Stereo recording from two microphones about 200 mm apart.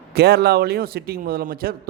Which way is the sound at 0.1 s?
55° right (ahead or behind).